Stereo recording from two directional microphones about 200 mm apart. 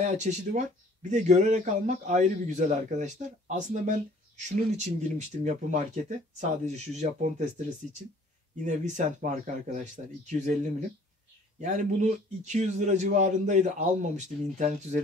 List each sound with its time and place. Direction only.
0.0 s a man's voice: 35° right (ahead or behind)
8.6 s a man's voice: 35° right (ahead or behind)
11.6 s a man's voice: 35° right (ahead or behind)